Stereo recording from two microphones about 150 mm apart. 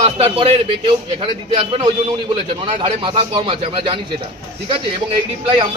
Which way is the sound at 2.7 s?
40° right (ahead or behind).